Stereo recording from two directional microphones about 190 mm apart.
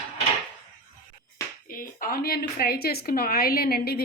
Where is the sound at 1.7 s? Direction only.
45° left (ahead or behind).